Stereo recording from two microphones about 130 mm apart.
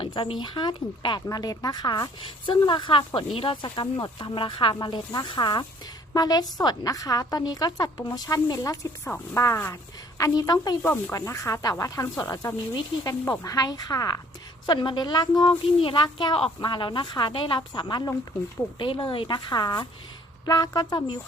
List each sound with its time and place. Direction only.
0.0 s a woman's voice: 40° left (ahead or behind)
10.8 s a woman's voice: 15° left (ahead or behind); by 21.2 s 30° left (ahead or behind)